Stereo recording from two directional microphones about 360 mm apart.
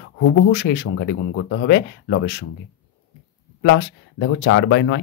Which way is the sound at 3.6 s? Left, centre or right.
Left.